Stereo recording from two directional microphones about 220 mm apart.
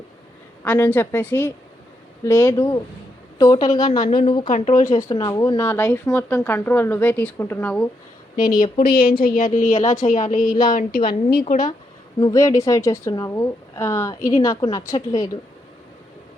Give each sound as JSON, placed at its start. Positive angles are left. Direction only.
{"t": 0.6, "sound": "a woman's voice", "side_deg": 10}
{"t": 4.4, "sound": "a woman's voice", "side_deg": 35}
{"t": 4.9, "sound": "a woman's voice", "side_deg": 15}
{"t": 8.8, "sound": "a woman's voice", "side_deg": 45}
{"t": 12.2, "sound": "a woman's voice", "side_deg": 15}